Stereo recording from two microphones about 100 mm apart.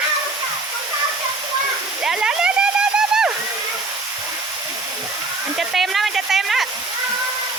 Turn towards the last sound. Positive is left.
turn(degrees=0)  # may be behind; listen again after turning